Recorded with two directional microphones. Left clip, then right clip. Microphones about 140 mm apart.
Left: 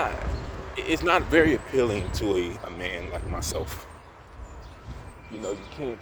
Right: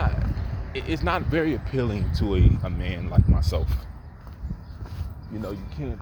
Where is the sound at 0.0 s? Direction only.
25° left (ahead or behind).